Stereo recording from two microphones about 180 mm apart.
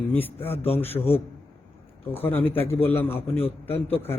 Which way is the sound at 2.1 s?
10° left (ahead or behind).